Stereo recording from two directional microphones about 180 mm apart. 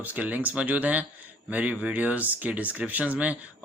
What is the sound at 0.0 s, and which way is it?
Speech, 10° right (ahead or behind).